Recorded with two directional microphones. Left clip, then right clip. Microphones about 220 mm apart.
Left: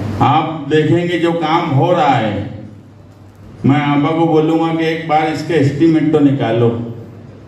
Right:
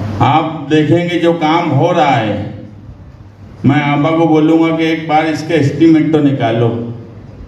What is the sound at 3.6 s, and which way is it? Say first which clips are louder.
A man's voice: right 2 dB; 50° right (ahead or behind).